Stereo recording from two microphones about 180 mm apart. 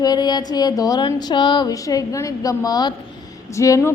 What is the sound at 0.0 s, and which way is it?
A woman's voice, 20° left (ahead or behind).